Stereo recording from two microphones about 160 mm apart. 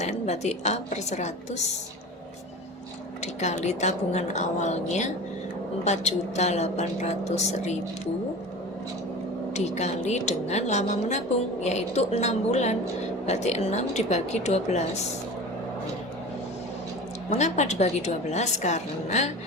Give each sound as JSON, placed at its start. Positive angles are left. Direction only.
{"t": 0.0, "sound": "a woman's voice", "side_deg": 45}
{"t": 3.4, "sound": "a woman's voice", "side_deg": 45}
{"t": 9.6, "sound": "a woman's voice", "side_deg": 45}
{"t": 17.2, "sound": "a woman's voice", "side_deg": 45}